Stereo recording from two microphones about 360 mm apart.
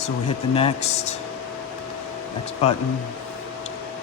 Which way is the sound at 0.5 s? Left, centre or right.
Centre.